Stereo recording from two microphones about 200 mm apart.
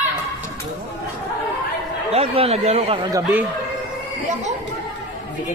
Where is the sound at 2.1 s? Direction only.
30° right (ahead or behind).